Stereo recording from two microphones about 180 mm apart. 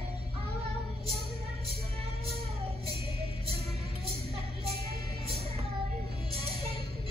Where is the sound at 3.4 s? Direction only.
35° right (ahead or behind).